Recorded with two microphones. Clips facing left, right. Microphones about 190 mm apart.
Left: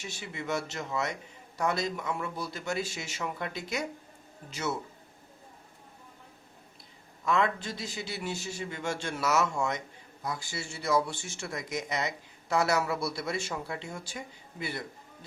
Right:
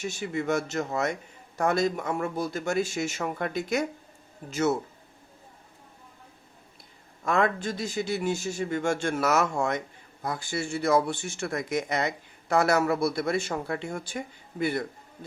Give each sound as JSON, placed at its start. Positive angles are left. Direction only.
{"t": 0.0, "sound": "speech", "side_deg": -45}
{"t": 7.3, "sound": "speech", "side_deg": -50}